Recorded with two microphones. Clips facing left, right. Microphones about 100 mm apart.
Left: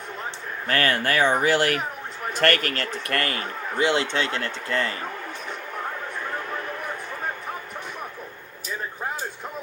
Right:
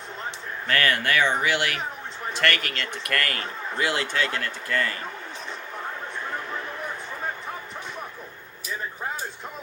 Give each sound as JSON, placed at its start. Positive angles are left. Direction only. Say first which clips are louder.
{"t": 0.7, "sound": "speech", "louder": "left 1 dB", "side_deg": 35}